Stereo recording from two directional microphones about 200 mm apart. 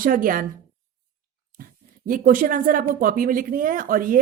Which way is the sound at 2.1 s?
45° right (ahead or behind).